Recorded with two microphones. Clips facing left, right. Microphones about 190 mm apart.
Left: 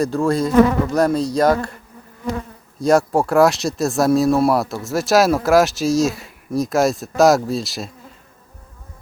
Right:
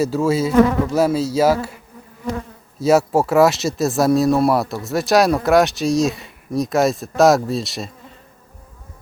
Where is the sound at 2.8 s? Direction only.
5° right (ahead or behind).